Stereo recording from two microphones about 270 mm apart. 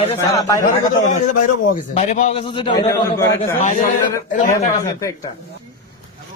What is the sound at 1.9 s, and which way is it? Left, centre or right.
A man's voice, left.